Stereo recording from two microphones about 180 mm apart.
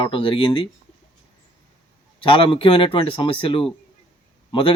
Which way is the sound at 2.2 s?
30° left (ahead or behind).